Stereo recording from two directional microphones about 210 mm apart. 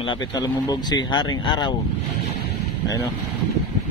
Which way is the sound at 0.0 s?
20° left (ahead or behind).